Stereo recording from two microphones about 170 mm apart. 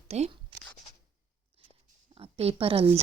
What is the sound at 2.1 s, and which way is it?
Speech, 35° right (ahead or behind).